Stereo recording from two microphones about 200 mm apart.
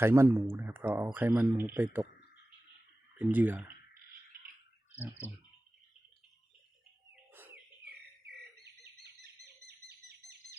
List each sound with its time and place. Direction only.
0.0 s speech: 15° right (ahead or behind)
3.2 s speech: 10° right (ahead or behind)
7.3 s bird: 10° right (ahead or behind)
9.6 s bird: 55° right (ahead or behind)